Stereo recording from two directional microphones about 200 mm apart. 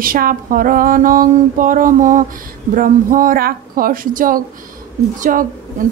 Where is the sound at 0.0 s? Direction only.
45° right (ahead or behind).